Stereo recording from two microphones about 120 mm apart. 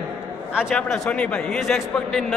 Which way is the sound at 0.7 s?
10° left (ahead or behind).